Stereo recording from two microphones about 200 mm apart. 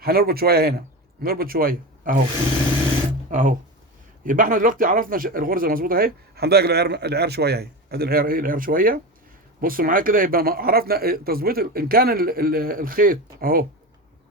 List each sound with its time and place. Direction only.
0.0 s speech: 50° right (ahead or behind)
3.2 s speech: 40° right (ahead or behind)